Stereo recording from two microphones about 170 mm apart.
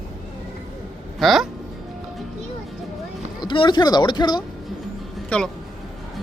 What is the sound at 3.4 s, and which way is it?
Speech, 30° left (ahead or behind).